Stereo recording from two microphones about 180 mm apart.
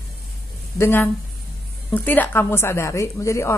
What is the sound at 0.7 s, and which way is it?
A woman's voice, 15° left (ahead or behind).